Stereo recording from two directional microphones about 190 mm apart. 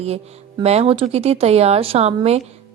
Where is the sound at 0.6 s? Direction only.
35° right (ahead or behind).